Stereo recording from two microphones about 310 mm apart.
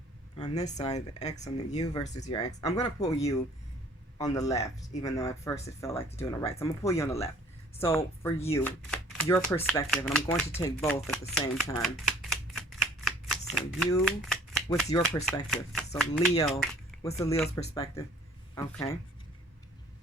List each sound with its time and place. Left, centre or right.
0.3 s speech: centre
11.3 s shuffling cards: centre
14.8 s speech: centre